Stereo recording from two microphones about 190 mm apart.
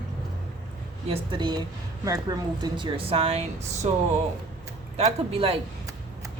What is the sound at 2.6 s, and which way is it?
A woman's voice, 25° right (ahead or behind).